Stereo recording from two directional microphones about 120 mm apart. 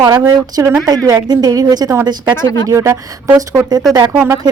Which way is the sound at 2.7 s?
25° right (ahead or behind).